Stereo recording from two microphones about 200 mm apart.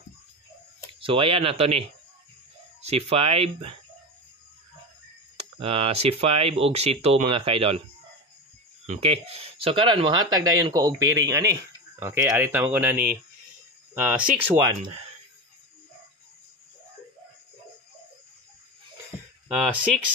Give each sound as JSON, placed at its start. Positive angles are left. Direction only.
{"t": 1.0, "sound": "speech", "side_deg": -30}
{"t": 5.4, "sound": "speech", "side_deg": -30}
{"t": 8.8, "sound": "speech", "side_deg": -30}
{"t": 19.4, "sound": "speech", "side_deg": -5}